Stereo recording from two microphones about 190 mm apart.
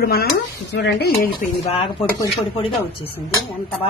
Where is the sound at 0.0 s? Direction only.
55° left (ahead or behind).